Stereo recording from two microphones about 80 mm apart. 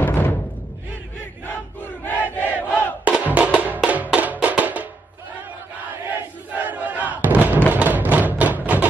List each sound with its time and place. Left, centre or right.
0.1 s music: left
2.0 s battle cry: left
3.1 s music: centre
6.1 s battle cry: right
7.7 s music: right